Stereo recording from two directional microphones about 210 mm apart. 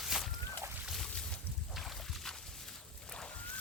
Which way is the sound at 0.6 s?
5° right (ahead or behind).